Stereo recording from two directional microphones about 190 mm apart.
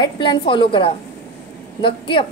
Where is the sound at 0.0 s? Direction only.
25° left (ahead or behind).